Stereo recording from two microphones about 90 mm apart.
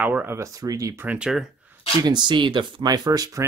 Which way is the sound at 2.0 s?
55° right (ahead or behind).